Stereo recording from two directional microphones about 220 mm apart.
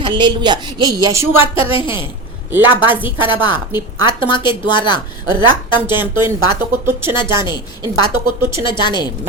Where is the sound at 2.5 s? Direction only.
10° right (ahead or behind).